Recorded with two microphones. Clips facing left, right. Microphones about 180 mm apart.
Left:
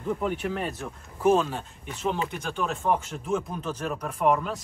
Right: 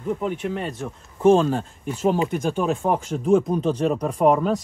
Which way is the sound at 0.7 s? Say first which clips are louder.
Right 5 dB; 30° right (ahead or behind).